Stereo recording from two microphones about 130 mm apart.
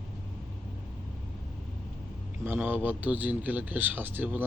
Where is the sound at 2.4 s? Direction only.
15° right (ahead or behind).